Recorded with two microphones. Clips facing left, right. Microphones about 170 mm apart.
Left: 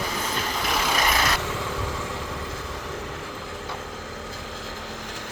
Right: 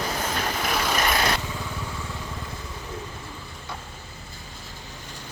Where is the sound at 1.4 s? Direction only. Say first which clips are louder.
Left 4 dB; 85° left.